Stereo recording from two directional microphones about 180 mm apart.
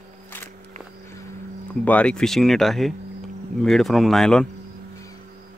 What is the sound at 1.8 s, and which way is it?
Speech, 10° left (ahead or behind).